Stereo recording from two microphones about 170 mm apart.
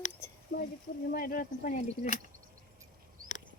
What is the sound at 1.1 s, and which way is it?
Speech, 60° left (ahead or behind).